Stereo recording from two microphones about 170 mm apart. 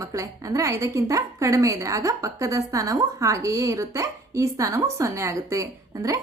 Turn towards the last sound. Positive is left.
turn(degrees=-20)  # may be behind; listen again after turning